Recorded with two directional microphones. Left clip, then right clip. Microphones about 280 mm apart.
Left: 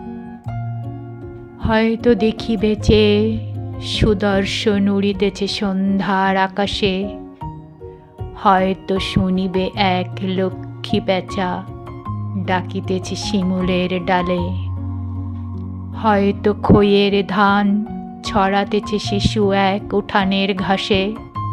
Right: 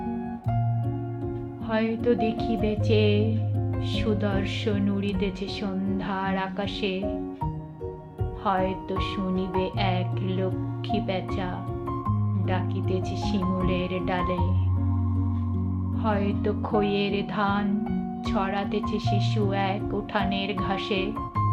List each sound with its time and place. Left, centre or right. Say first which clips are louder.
1.6 s speech: left 10 dB; left
8.4 s speech: left 11 dB; left
16.0 s speech: left 12 dB; left
21.1 s music: left 2 dB; centre